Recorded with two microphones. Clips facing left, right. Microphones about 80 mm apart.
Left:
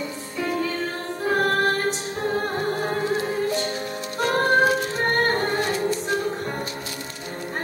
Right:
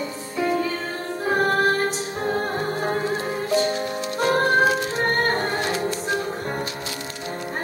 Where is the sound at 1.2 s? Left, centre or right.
Centre.